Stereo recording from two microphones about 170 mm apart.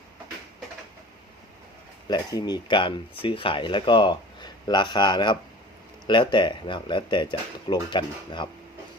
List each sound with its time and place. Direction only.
2.0 s speech: 25° left (ahead or behind)